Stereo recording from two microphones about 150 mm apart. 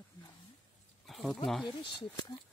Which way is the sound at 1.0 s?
Centre (ahead or behind).